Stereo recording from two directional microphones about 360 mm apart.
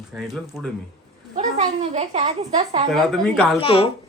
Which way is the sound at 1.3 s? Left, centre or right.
Centre.